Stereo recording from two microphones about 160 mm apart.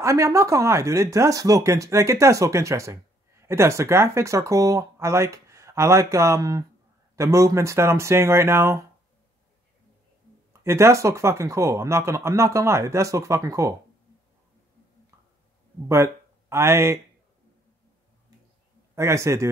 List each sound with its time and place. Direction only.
0.0 s speech: 20° right (ahead or behind)
10.6 s speech: 15° right (ahead or behind)
15.9 s speech: 15° right (ahead or behind)
18.9 s speech: 20° right (ahead or behind)